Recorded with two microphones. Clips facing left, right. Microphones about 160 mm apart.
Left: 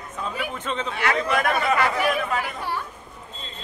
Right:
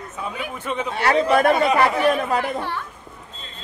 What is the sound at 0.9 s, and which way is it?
A man's voice, 35° right (ahead or behind).